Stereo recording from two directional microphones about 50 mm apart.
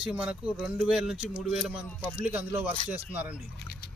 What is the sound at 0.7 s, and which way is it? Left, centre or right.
Speech, centre.